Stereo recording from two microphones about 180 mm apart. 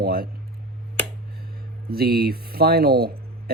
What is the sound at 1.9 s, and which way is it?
Speech, 60° right (ahead or behind).